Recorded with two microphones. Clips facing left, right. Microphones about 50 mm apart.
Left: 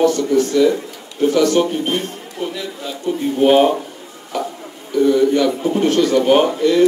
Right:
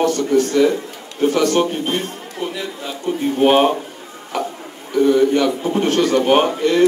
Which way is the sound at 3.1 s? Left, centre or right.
Right.